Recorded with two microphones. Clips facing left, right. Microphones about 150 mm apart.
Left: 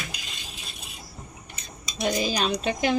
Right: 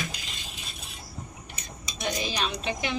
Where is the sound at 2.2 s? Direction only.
35° left (ahead or behind).